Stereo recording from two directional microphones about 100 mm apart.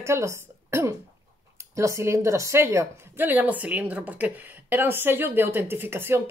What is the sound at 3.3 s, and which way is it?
A woman's voice, 15° right (ahead or behind).